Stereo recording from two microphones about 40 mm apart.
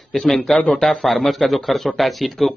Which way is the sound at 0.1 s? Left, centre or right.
Centre.